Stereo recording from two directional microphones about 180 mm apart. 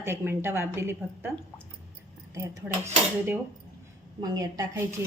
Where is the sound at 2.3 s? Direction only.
15° right (ahead or behind).